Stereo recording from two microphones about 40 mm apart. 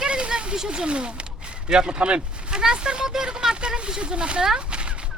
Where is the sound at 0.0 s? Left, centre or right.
Right.